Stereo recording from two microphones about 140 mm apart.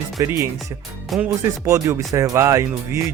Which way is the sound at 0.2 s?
20° right (ahead or behind).